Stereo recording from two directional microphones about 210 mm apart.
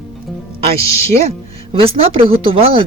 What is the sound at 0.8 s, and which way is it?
Speech, 15° left (ahead or behind).